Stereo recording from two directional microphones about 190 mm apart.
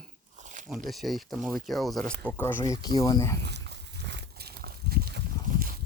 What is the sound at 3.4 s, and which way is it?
Livestock, 60° right (ahead or behind).